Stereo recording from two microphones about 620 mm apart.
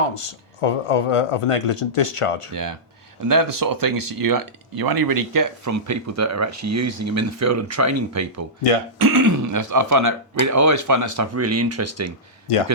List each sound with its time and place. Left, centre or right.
0.6 s speech: left
2.5 s speech: right
12.5 s speech: left